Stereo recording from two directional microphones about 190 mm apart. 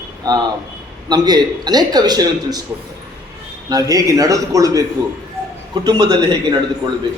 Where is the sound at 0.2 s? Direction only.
20° right (ahead or behind).